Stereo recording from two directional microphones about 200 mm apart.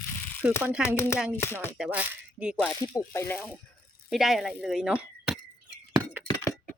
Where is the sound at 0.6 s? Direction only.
10° right (ahead or behind).